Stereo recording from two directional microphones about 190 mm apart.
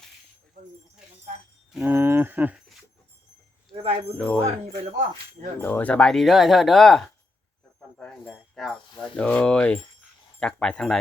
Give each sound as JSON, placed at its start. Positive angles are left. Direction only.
{"t": 1.7, "sound": "speech", "side_deg": -10}
{"t": 4.2, "sound": "speech", "side_deg": 5}
{"t": 4.4, "sound": "speech", "side_deg": -35}
{"t": 5.5, "sound": "speech", "side_deg": 10}